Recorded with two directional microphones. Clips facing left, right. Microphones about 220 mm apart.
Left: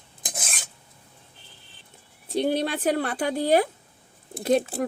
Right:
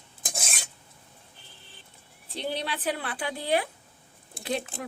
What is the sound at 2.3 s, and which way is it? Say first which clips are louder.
Speech: left 9 dB; 45° left (ahead or behind).